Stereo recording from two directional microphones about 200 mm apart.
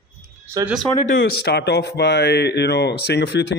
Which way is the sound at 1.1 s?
60° left (ahead or behind).